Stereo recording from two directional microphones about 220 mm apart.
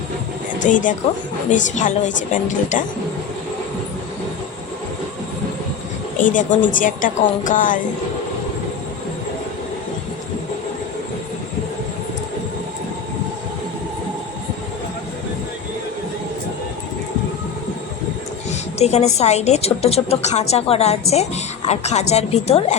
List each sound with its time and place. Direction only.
0.6 s a woman's voice: 35° left (ahead or behind)
6.2 s a woman's voice: 35° left (ahead or behind)
18.8 s a woman's voice: 30° left (ahead or behind)